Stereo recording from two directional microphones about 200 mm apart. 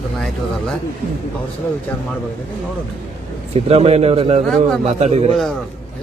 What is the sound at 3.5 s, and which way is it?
Speech, 30° right (ahead or behind).